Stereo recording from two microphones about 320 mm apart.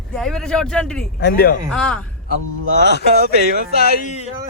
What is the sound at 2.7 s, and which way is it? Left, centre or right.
Speech, left.